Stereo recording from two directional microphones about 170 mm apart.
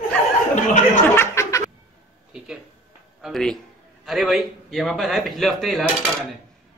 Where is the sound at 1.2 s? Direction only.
20° left (ahead or behind).